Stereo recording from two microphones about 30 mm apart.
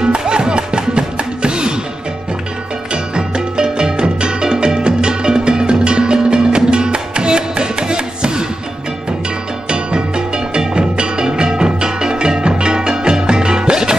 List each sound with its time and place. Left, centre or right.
0.2 s music: right
2.9 s music: right
9.7 s music: right